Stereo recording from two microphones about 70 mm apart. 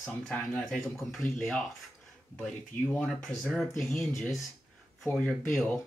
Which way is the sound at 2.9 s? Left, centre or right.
Centre.